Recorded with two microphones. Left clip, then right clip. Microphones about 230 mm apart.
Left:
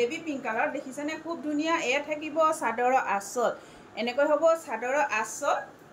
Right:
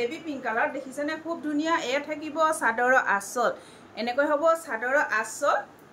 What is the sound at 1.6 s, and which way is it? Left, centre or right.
A woman's voice, centre.